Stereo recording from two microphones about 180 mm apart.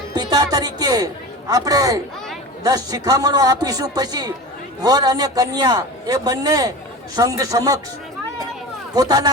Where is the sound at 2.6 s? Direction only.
20° right (ahead or behind).